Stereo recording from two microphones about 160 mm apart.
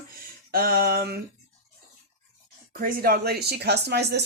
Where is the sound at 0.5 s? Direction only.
65° right (ahead or behind).